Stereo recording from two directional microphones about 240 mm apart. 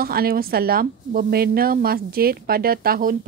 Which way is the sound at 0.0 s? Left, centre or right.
Right.